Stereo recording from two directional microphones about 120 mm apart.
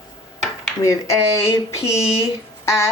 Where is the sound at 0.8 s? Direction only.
25° left (ahead or behind).